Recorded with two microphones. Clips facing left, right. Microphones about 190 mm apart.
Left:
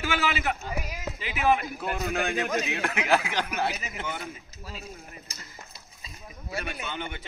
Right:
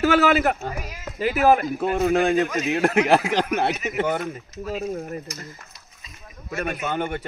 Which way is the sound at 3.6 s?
70° right (ahead or behind).